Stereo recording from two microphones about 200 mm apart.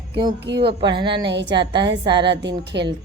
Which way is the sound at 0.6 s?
25° right (ahead or behind).